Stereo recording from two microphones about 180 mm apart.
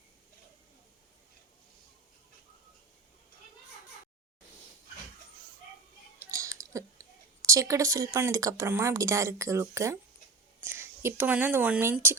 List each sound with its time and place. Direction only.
6.1 s clicking: 15° right (ahead or behind)
8.1 s speech: 15° right (ahead or behind)